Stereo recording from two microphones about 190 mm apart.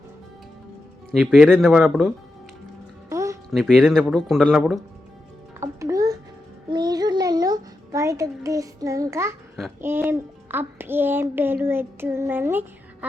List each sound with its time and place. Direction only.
1.1 s speech: centre (ahead or behind)
3.1 s music: 15° right (ahead or behind)
3.5 s speech: centre (ahead or behind)
5.5 s music: 15° right (ahead or behind)
9.8 s a child's voice: 10° right (ahead or behind)